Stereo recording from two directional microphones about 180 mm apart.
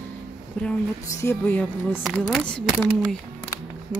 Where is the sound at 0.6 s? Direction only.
10° left (ahead or behind).